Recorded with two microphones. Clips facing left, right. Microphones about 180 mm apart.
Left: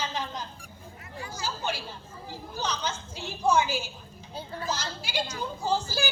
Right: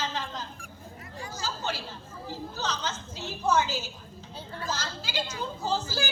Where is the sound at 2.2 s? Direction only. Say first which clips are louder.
Even; 15° left (ahead or behind).